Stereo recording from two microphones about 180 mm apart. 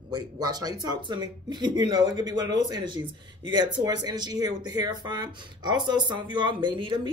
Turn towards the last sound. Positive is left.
turn(degrees=-25)  # may be behind; listen again after turning